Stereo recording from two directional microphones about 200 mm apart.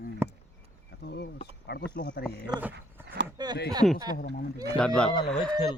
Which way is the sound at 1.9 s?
55° left (ahead or behind).